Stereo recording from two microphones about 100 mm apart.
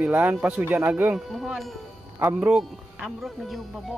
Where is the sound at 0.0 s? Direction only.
15° right (ahead or behind).